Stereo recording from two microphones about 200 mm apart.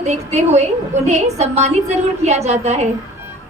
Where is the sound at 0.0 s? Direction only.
35° right (ahead or behind).